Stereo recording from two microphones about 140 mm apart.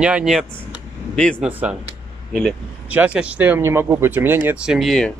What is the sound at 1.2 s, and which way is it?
Speech, 5° left (ahead or behind).